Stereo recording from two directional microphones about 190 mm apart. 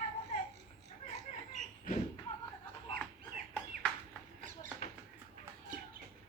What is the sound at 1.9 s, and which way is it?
Thump, 45° left (ahead or behind).